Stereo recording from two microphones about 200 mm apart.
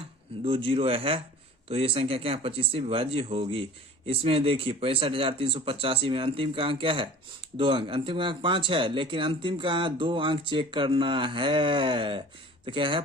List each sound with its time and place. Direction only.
0.4 s speech: 25° right (ahead or behind)